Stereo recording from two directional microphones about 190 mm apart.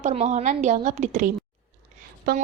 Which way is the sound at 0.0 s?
35° right (ahead or behind).